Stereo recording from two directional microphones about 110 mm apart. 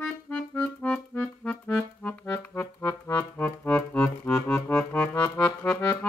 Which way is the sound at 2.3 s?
20° left (ahead or behind).